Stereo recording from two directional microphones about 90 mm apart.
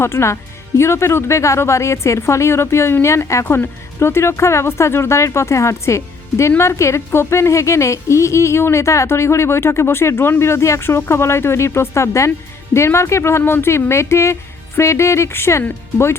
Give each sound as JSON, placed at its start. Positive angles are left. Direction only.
{"t": 0.0, "sound": "a woman's voice", "side_deg": 30}